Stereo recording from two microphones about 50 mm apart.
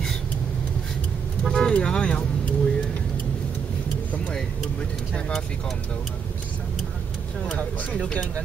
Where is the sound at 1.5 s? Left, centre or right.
Left.